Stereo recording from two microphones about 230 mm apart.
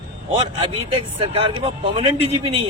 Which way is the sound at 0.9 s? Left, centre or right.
Right.